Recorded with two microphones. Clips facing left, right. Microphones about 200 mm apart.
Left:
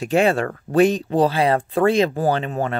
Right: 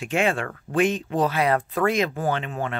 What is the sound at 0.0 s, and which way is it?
Speech, 35° left (ahead or behind).